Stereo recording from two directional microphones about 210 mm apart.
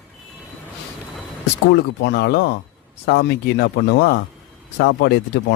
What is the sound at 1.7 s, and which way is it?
Speech, 50° left (ahead or behind).